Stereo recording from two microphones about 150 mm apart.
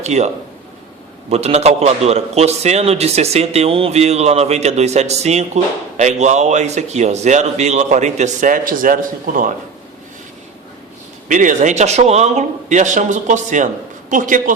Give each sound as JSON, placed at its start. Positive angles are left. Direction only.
{"t": 0.0, "sound": "speech", "side_deg": -50}
{"t": 1.3, "sound": "a man's voice", "side_deg": -45}
{"t": 11.3, "sound": "a man's voice", "side_deg": -60}